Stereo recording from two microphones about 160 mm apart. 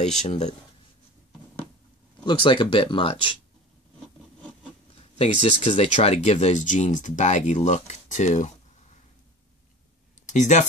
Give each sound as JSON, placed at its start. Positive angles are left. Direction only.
{"t": 0.3, "sound": "speech", "side_deg": 45}
{"t": 2.2, "sound": "speech", "side_deg": 30}
{"t": 5.1, "sound": "speech", "side_deg": 40}
{"t": 10.2, "sound": "speech", "side_deg": 50}